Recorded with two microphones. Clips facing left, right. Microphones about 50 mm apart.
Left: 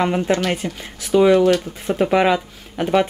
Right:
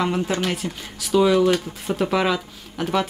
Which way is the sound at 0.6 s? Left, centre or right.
Centre.